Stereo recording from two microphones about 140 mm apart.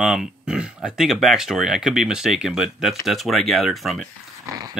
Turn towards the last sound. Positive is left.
turn(degrees=-25)  # may be behind; listen again after turning